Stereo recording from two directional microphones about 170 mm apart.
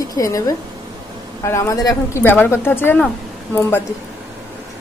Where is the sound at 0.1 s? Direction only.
20° left (ahead or behind).